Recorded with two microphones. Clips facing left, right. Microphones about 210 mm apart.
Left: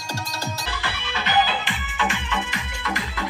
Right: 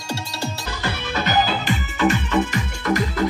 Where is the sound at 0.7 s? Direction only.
45° right (ahead or behind).